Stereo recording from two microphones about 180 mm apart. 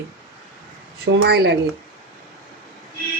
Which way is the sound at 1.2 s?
65° right (ahead or behind).